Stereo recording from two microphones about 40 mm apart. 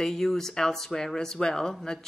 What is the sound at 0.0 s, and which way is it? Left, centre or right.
Speech, centre.